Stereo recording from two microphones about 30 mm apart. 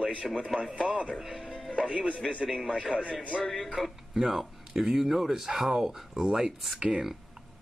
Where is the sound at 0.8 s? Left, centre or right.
Right.